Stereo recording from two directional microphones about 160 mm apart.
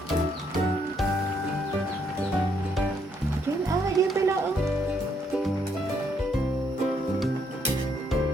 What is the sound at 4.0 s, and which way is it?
Music, 20° right (ahead or behind).